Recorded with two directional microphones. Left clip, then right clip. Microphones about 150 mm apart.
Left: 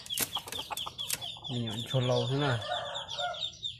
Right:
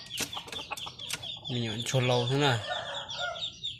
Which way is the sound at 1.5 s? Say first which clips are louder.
Right 4 dB; 20° right (ahead or behind).